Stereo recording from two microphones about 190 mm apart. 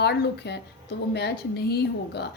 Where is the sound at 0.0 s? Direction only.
60° left (ahead or behind).